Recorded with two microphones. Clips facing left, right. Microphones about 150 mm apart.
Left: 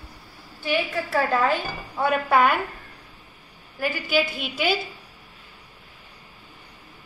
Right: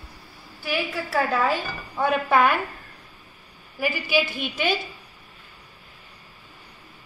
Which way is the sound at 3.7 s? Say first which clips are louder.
Even; 5° right (ahead or behind).